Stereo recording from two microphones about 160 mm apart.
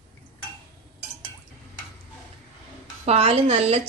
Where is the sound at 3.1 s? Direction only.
40° right (ahead or behind).